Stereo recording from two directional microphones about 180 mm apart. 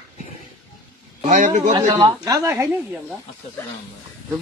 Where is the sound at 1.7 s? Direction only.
20° right (ahead or behind).